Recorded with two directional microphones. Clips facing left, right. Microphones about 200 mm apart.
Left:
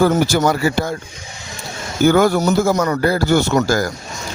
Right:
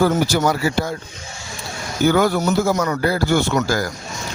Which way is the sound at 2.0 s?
45° left (ahead or behind).